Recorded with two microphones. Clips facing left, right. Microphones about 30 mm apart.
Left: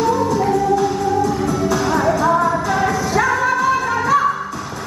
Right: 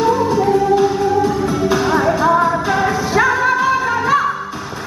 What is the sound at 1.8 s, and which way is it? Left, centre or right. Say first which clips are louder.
Music: right 2 dB; centre.